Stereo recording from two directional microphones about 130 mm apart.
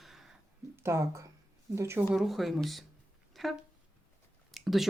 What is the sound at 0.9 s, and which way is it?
Speech, 20° right (ahead or behind).